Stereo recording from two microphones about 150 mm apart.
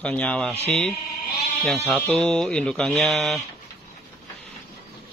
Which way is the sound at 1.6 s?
Centre (ahead or behind).